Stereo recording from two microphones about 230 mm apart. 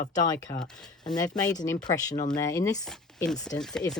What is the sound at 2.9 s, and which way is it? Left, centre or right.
Speech, centre.